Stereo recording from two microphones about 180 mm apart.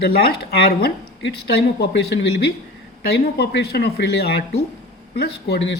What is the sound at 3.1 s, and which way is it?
Speech, 60° left (ahead or behind).